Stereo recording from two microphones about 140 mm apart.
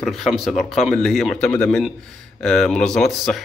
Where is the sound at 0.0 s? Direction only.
Centre (ahead or behind).